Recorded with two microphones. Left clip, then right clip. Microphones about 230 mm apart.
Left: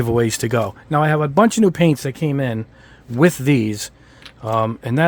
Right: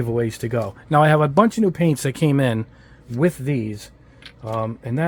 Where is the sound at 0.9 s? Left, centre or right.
Centre.